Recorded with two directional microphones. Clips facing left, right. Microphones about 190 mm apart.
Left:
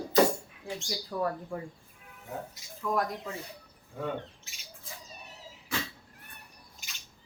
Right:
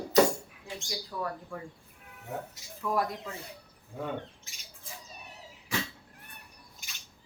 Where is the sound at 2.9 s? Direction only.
5° right (ahead or behind).